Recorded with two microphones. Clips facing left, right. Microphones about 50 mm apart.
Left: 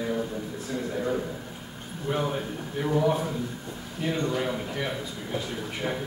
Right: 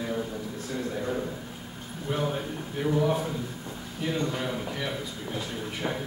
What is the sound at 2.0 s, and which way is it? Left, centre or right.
A man's voice, centre.